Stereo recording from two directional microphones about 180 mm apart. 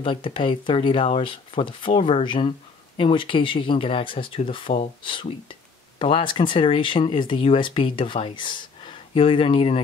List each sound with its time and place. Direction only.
0.0 s speech: 30° left (ahead or behind)